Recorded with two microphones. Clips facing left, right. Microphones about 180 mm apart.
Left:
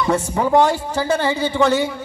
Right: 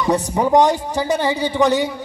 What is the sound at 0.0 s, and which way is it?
A man's voice, 15° right (ahead or behind).